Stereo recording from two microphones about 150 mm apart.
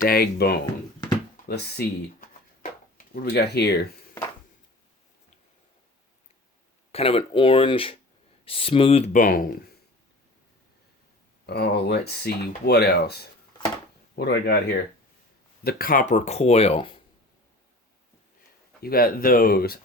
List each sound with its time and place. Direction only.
0.0 s speech: 85° left
3.1 s speech: 85° left
6.9 s speech: 40° left (ahead or behind)
9.1 s speech: 65° left (ahead or behind)
11.4 s speech: 90° left
15.6 s speech: 70° left (ahead or behind); by 17.0 s 40° left (ahead or behind)
18.8 s speech: 85° left